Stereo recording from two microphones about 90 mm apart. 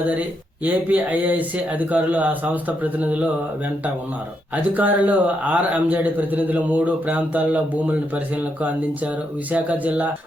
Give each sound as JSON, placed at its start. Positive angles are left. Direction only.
{"t": 0.6, "sound": "a man's voice", "side_deg": -15}
{"t": 4.5, "sound": "a man's voice", "side_deg": -20}